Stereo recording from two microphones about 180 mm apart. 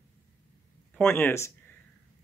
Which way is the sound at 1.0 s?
10° left (ahead or behind).